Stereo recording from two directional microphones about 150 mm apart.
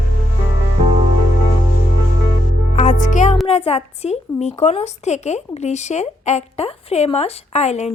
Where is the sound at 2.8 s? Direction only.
60° left (ahead or behind).